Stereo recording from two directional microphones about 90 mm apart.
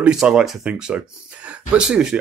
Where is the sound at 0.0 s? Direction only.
10° right (ahead or behind).